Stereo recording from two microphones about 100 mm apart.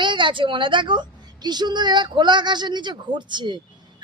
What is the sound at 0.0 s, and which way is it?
A woman's voice, 55° right (ahead or behind).